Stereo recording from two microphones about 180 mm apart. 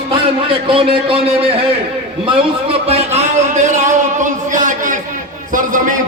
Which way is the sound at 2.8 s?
35° right (ahead or behind).